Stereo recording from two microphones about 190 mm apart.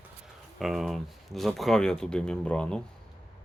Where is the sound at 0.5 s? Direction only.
Centre (ahead or behind).